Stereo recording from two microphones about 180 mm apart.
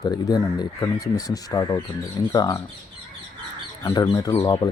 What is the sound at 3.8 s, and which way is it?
Speech, 25° left (ahead or behind).